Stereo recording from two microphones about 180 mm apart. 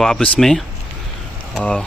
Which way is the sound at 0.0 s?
Centre (ahead or behind).